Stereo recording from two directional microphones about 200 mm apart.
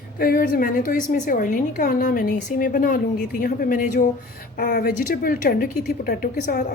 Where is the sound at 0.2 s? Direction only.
50° left (ahead or behind).